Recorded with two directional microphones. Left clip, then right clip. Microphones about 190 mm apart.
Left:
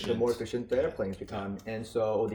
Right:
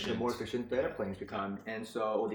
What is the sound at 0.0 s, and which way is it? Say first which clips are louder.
Speech: left 6 dB; 50° left (ahead or behind).